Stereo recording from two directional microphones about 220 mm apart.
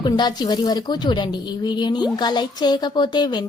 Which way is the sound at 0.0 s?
20° left (ahead or behind).